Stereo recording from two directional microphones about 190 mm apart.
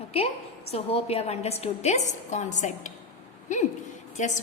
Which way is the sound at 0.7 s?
30° left (ahead or behind).